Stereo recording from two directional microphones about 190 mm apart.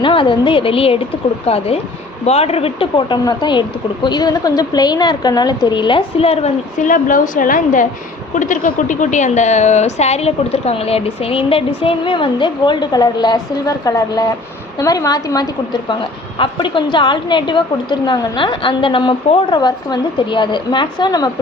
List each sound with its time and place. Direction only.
0.0 s a woman's voice: 25° left (ahead or behind)